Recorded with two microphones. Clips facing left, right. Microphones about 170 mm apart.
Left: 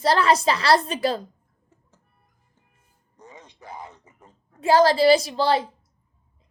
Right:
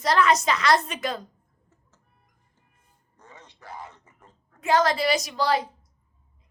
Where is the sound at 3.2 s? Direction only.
15° left (ahead or behind).